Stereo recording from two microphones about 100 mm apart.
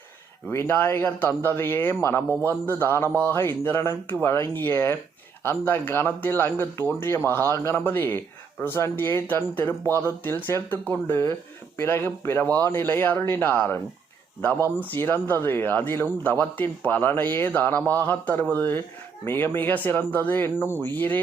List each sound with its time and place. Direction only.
0.5 s a man's voice: 25° left (ahead or behind)